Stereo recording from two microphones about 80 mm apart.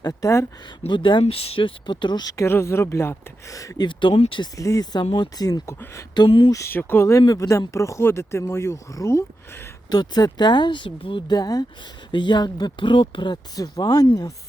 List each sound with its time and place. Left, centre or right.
0.0 s speech: left
0.9 s speech: left
2.2 s speech: left
3.8 s speech: left
4.5 s speech: left
6.1 s speech: left
6.7 s speech: left
7.1 s speech: left
9.9 s speech: left
12.1 s speech: left
13.6 s speech: left